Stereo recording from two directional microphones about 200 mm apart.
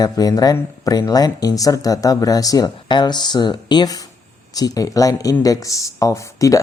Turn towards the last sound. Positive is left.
turn(degrees=15)  # may be behind; listen again after turning